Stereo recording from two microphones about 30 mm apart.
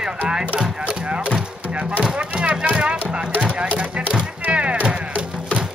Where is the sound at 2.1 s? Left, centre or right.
Right.